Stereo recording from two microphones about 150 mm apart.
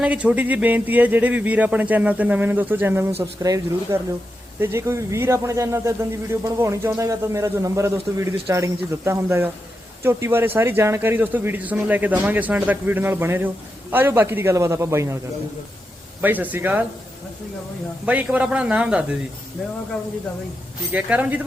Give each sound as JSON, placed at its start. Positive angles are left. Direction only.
{"t": 0.0, "sound": "speech", "side_deg": -10}
{"t": 16.2, "sound": "speech", "side_deg": -10}
{"t": 18.0, "sound": "speech", "side_deg": -10}
{"t": 20.9, "sound": "speech", "side_deg": -10}